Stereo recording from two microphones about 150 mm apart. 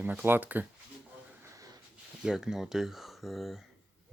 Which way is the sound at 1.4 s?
20° right (ahead or behind).